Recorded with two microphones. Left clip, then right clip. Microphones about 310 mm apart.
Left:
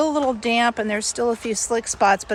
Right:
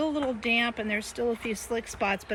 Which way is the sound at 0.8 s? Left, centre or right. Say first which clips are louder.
Left 7 dB; left.